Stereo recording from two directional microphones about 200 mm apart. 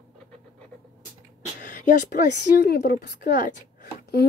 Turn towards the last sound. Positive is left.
turn(degrees=50)  # may be behind; listen again after turning